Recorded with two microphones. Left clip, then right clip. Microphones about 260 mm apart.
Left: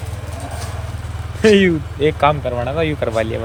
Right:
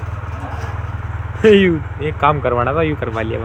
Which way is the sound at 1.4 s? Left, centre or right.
Centre.